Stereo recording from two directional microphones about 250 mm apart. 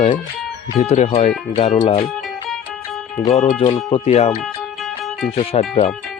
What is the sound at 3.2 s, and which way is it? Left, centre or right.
Speech, left.